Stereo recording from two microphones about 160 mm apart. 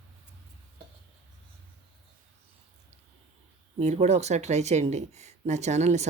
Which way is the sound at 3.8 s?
45° right (ahead or behind).